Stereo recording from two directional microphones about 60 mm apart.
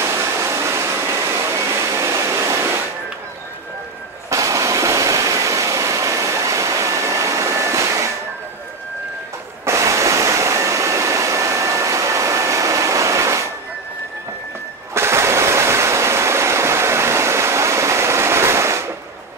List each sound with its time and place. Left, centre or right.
0.0 s a sound: right
4.3 s waterfall: right
9.7 s waterfall: right
15.0 s stream: right